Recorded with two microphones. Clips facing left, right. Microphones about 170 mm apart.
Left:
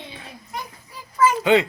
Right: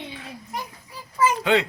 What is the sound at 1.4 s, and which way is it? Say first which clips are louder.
Speech: left 5 dB; centre (ahead or behind).